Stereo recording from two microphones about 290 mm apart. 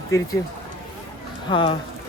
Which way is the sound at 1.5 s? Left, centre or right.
Centre.